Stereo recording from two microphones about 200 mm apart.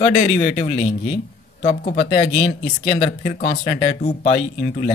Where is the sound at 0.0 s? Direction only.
35° left (ahead or behind).